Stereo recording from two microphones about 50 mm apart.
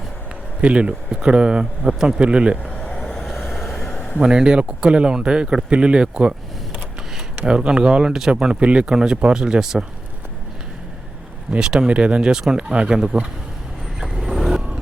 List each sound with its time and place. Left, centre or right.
0.6 s speech: right
1.9 s speech: centre
2.1 s speech: right
2.6 s vehicle: left
2.9 s vehicle: centre
3.2 s vehicle: centre
3.9 s a sound: left
4.2 s speech: centre
7.3 s speech: centre
8.9 s speech: centre
11.6 s speech: centre
14.0 s vehicle: centre